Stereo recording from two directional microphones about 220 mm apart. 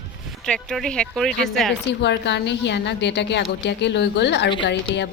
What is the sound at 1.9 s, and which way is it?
A woman's voice, 50° left (ahead or behind).